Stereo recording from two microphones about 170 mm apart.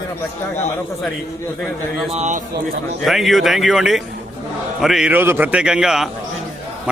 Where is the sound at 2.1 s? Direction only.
45° right (ahead or behind).